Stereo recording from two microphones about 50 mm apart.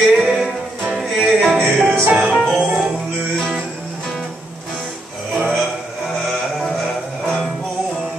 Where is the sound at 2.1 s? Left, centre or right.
Right.